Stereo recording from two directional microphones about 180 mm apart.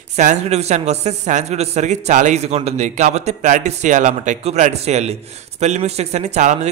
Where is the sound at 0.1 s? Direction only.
40° right (ahead or behind).